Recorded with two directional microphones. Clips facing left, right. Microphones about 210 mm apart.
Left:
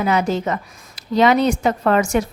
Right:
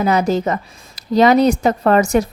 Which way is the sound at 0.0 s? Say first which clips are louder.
Right 3 dB; 40° right (ahead or behind).